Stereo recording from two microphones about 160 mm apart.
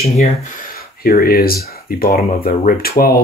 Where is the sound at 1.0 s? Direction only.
70° left (ahead or behind).